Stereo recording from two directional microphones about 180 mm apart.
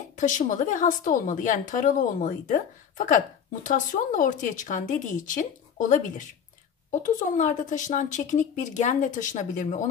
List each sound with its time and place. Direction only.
0.2 s a woman's voice: 45° left (ahead or behind)